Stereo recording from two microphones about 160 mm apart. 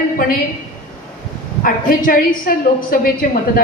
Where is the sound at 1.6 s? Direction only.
60° left (ahead or behind).